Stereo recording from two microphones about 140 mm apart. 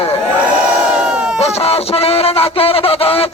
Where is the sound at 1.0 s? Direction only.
10° right (ahead or behind).